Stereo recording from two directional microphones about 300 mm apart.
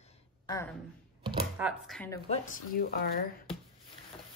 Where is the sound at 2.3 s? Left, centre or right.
Left.